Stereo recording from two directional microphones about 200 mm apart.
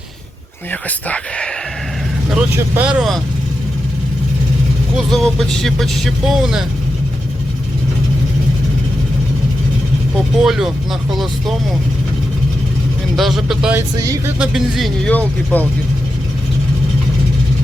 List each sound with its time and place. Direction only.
0.7 s speech: 5° left (ahead or behind)
2.3 s speech: 5° right (ahead or behind)
5.1 s speech: centre (ahead or behind)
10.4 s speech: centre (ahead or behind)
13.1 s speech: centre (ahead or behind)
14.0 s music: 15° right (ahead or behind)
14.3 s speech: 5° right (ahead or behind)